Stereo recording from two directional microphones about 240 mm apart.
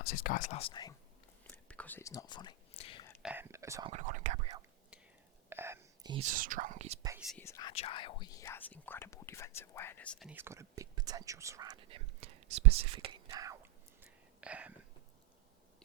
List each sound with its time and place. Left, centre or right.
0.0 s speech: left; by 0.9 s centre
1.5 s whispering: centre; by 3.1 s left
3.2 s speech: centre
3.9 s speech: right
5.5 s whispering: centre
6.2 s speech: right
7.3 s speech: centre
7.7 s speech: left; by 14.8 s centre